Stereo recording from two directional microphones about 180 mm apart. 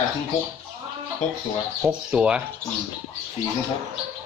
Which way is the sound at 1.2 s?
40° left (ahead or behind).